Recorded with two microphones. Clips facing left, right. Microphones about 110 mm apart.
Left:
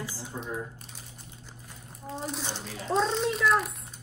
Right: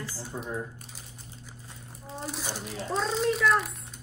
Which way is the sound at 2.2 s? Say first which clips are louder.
Even; centre (ahead or behind).